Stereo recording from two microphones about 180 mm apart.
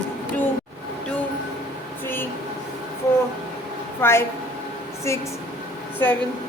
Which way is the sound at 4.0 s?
15° left (ahead or behind).